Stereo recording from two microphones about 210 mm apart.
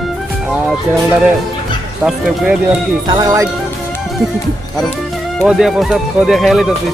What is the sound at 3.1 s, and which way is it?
Speech, 15° right (ahead or behind).